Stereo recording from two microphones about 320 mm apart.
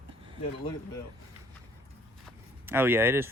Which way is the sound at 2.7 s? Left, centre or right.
Centre.